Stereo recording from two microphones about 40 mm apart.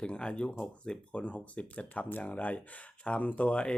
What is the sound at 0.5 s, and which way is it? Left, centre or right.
Speech, centre.